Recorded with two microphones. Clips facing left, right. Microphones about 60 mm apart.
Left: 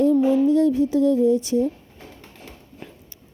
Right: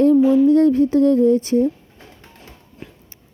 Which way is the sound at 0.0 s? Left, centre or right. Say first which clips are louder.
Right 4 dB; right.